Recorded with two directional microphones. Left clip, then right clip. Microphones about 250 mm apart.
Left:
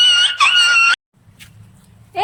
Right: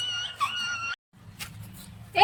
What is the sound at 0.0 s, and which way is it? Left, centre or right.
Screaming, left.